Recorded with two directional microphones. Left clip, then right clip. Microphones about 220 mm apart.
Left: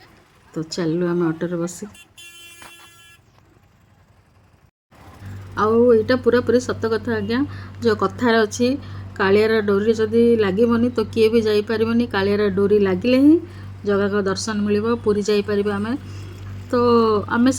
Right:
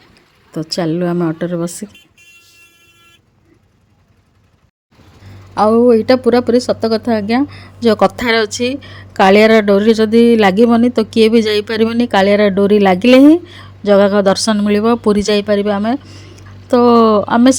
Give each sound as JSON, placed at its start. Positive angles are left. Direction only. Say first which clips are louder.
{"t": 0.5, "sound": "speech", "louder": "right 6 dB", "side_deg": -30}
{"t": 5.5, "sound": "speech", "louder": "right 5 dB", "side_deg": -30}